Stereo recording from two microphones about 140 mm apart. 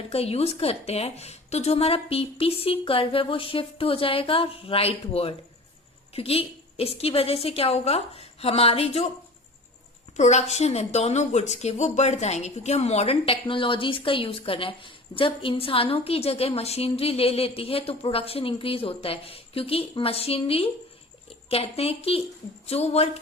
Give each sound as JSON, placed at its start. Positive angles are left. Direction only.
{"t": 0.1, "sound": "speech", "side_deg": 45}
{"t": 10.2, "sound": "speech", "side_deg": 55}